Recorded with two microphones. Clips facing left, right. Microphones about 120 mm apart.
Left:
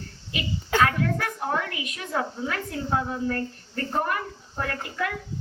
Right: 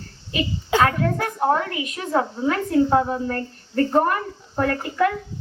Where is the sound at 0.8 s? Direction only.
35° right (ahead or behind).